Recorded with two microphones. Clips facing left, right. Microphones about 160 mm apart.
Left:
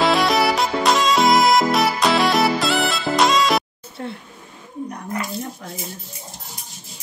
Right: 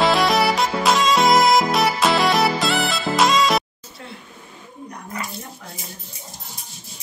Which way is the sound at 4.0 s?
35° left (ahead or behind).